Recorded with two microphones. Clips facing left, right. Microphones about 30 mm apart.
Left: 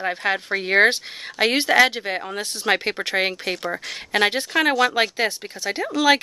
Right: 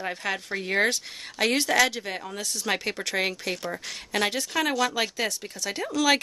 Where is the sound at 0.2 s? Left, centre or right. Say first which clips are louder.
Left 7 dB; left.